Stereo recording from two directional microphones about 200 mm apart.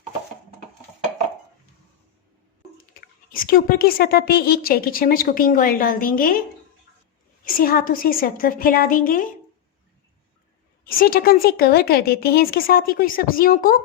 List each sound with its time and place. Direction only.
3.2 s a woman's voice: 45° left (ahead or behind)
7.4 s a woman's voice: 45° left (ahead or behind)
10.8 s a woman's voice: 45° left (ahead or behind)